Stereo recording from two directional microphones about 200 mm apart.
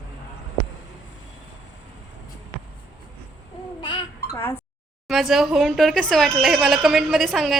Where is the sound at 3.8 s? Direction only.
25° left (ahead or behind).